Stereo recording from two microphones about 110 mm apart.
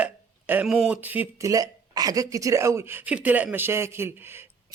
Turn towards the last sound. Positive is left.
turn(degrees=-20)  # may be behind; listen again after turning